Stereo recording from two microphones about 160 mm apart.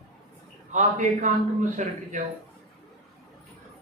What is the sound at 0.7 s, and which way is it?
A man's voice, 50° right (ahead or behind).